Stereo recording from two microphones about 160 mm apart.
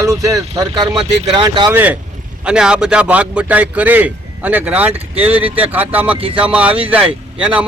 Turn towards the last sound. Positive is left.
turn(degrees=-5)  # may be behind; listen again after turning